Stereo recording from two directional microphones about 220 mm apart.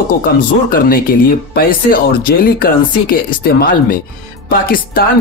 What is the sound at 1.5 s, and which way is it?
Speech, 45° left (ahead or behind).